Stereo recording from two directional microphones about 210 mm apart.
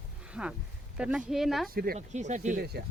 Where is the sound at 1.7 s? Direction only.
45° right (ahead or behind).